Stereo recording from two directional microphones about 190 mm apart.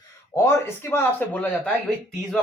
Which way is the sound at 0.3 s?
15° left (ahead or behind).